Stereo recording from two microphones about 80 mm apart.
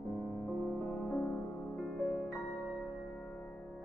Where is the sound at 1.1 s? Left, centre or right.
Left.